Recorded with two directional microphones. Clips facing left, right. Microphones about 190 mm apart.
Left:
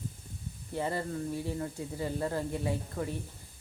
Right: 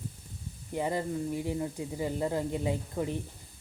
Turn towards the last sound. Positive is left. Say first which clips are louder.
# right 2 dB
turn(degrees=-20)  # may be behind; listen again after turning